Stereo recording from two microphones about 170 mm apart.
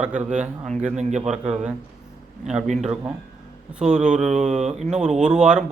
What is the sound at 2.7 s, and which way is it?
A man's voice, 5° right (ahead or behind).